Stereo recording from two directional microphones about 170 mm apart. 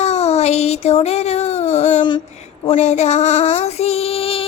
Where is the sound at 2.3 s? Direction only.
40° left (ahead or behind).